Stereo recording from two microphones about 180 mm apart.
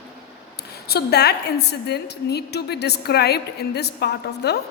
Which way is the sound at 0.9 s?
60° left (ahead or behind).